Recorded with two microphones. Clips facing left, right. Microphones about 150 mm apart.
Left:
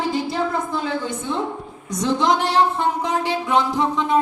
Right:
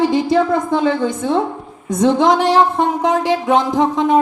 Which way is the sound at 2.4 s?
90° right.